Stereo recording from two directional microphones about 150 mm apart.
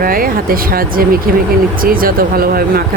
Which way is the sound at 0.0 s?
70° right (ahead or behind).